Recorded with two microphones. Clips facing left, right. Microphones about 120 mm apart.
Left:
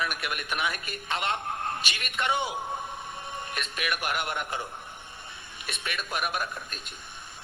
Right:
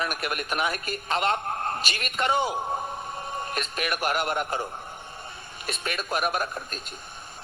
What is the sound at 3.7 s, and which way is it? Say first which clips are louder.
Speech: right 4 dB; 40° right (ahead or behind).